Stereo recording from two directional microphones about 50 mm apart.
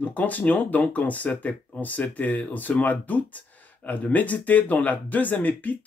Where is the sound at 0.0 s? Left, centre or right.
Left.